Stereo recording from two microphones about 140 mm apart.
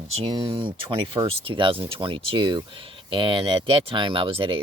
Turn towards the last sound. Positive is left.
turn(degrees=-40)  # may be behind; listen again after turning